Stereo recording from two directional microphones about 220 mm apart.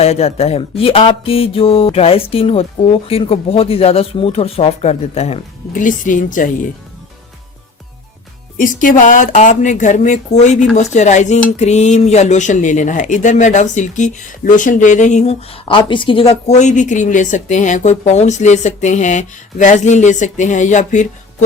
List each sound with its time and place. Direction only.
0.0 s speech: 30° left (ahead or behind)
8.5 s speech: 40° left (ahead or behind)